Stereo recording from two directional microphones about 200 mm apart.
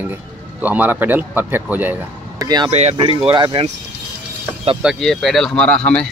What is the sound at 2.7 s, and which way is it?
Speech, 30° right (ahead or behind).